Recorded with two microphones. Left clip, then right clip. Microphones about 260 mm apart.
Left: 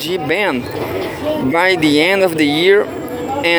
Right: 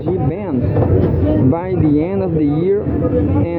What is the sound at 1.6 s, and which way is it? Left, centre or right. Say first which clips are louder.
Speech: left 5 dB; left.